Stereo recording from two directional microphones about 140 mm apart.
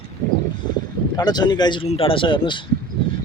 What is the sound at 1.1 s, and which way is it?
Speech, 30° left (ahead or behind).